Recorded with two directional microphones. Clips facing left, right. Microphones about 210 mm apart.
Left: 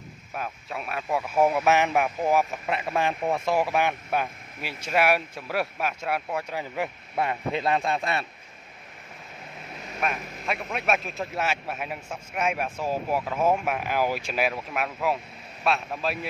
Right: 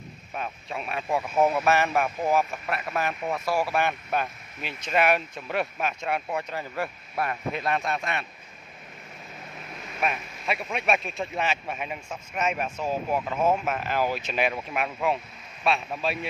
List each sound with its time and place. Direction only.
0.3 s a man's voice: 5° left (ahead or behind)
1.4 s speech: 15° left (ahead or behind)
6.6 s speech: 15° left (ahead or behind); by 8.3 s 35° left (ahead or behind)
10.0 s a man's voice: centre (ahead or behind)